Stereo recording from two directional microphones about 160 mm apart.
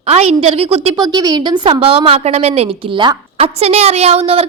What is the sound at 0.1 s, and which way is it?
Speech, 40° right (ahead or behind).